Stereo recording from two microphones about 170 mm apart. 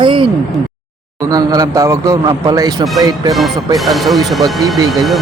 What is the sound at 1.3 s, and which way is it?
A man's voice, 25° right (ahead or behind).